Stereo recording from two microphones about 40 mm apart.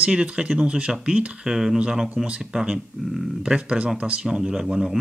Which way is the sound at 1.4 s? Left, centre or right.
Centre.